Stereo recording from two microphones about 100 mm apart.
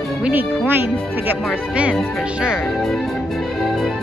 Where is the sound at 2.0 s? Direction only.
5° right (ahead or behind).